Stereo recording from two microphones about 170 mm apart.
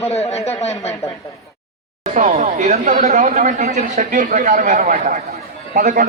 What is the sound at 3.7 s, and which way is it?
Speech, 45° right (ahead or behind).